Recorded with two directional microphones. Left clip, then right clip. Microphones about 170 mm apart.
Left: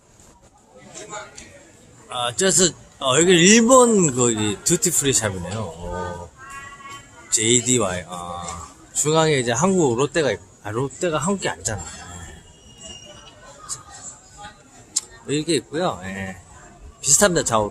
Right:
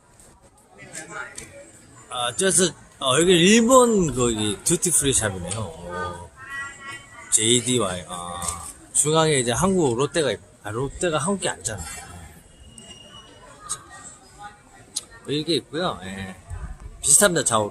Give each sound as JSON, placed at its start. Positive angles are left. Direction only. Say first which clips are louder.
{"t": 2.0, "sound": "a man's voice", "louder": "left 2 dB", "side_deg": 5}
{"t": 7.3, "sound": "speech", "louder": "left 1 dB", "side_deg": 0}
{"t": 14.9, "sound": "a man's voice", "louder": "left 3 dB", "side_deg": 15}